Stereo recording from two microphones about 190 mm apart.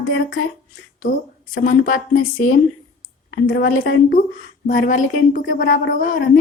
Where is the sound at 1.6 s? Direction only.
45° left (ahead or behind).